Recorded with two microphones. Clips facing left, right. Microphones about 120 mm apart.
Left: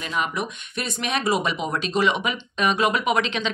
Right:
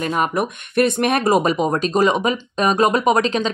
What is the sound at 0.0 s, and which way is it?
Speech, 45° right (ahead or behind).